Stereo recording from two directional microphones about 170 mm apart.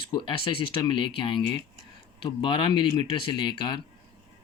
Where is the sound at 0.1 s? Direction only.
30° left (ahead or behind).